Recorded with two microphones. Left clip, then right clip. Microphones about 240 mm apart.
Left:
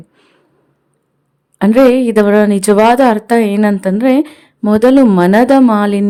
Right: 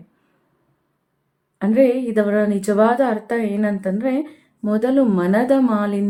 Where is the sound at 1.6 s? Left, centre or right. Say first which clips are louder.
Left 8 dB; left.